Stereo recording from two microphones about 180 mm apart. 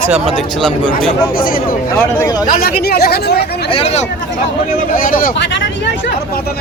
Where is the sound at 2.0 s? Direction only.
15° left (ahead or behind).